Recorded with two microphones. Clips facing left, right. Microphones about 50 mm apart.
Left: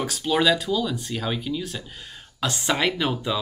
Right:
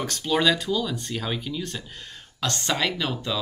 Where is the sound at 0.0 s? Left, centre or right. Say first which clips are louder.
Left 1 dB; centre.